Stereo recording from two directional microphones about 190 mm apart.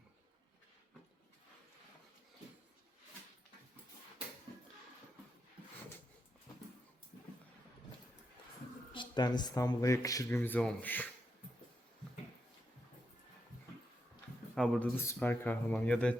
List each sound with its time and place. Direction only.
8.9 s speech: 25° left (ahead or behind)
14.5 s speech: centre (ahead or behind)
14.9 s speech: 10° left (ahead or behind)